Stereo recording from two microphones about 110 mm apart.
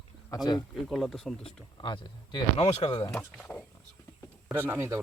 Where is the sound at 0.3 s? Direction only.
40° left (ahead or behind).